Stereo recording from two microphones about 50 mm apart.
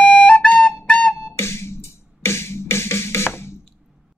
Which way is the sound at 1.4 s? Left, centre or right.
Left.